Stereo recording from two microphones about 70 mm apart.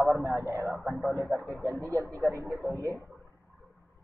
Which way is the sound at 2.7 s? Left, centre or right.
Right.